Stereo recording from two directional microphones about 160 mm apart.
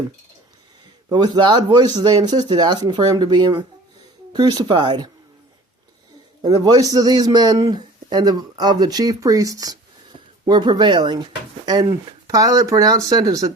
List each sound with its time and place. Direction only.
1.1 s speech: 25° right (ahead or behind)
6.4 s speech: 25° right (ahead or behind)